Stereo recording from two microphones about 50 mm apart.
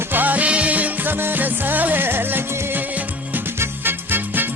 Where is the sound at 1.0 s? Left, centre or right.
Right.